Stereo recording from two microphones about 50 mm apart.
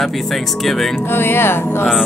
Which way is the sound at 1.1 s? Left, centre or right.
Left.